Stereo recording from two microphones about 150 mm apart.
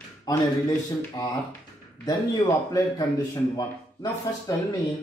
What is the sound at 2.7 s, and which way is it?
A man's voice, 25° left (ahead or behind).